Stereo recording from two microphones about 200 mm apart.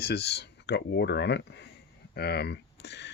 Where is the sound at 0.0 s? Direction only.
55° left (ahead or behind).